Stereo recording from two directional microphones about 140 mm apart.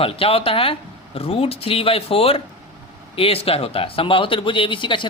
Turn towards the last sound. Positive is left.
turn(degrees=35)  # may be behind; listen again after turning